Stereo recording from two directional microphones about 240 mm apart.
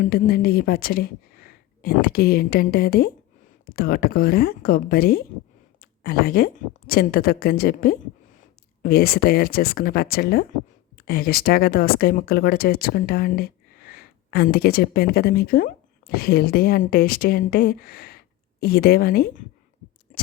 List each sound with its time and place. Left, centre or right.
0.0 s speech: left